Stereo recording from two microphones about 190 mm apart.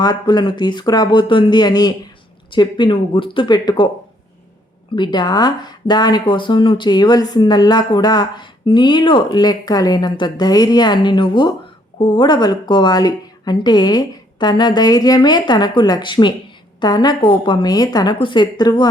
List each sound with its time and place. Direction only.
0.0 s speech: 20° left (ahead or behind)
4.9 s speech: 25° left (ahead or behind)